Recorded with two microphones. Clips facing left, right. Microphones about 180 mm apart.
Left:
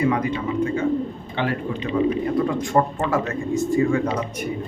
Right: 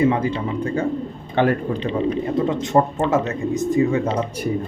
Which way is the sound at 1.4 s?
45° right (ahead or behind).